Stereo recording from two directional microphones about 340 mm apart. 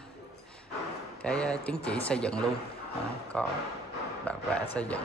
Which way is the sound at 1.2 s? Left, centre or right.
Centre.